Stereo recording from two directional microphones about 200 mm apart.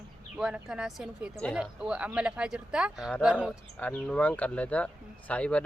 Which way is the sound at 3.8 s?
5° left (ahead or behind).